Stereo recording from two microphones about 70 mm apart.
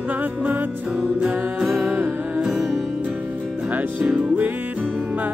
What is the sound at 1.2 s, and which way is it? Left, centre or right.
Music, right.